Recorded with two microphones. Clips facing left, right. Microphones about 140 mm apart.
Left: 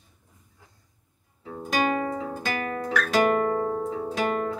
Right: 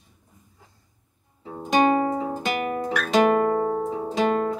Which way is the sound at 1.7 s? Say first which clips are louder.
Right 6 dB; 25° right (ahead or behind).